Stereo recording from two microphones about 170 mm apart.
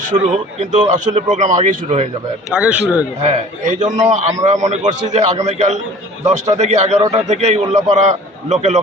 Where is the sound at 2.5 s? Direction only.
5° right (ahead or behind).